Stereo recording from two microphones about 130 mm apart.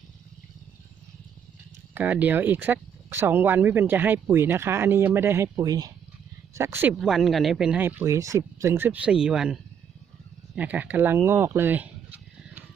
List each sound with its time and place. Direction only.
2.0 s speech: 15° right (ahead or behind)
7.0 s speech: 5° right (ahead or behind)